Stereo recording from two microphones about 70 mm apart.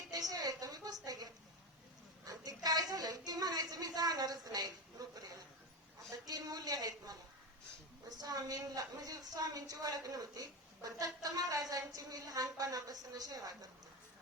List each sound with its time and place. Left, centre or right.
0.1 s a woman's voice: right
2.2 s a sound: right
2.6 s a woman's voice: right
8.2 s a woman's voice: right